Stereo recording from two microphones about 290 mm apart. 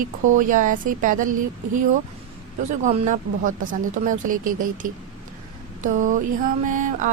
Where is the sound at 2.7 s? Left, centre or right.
Right.